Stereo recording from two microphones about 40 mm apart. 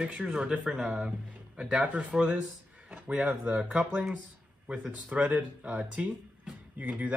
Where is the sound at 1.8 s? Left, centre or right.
Right.